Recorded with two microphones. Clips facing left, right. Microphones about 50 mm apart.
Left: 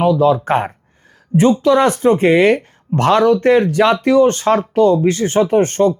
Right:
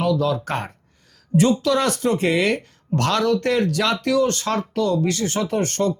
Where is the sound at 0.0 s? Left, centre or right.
Left.